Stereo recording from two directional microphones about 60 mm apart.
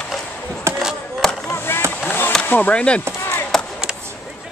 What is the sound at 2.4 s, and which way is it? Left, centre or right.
Speech, left.